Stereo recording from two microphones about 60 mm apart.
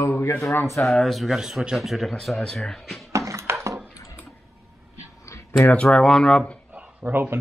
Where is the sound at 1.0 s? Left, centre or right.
Centre.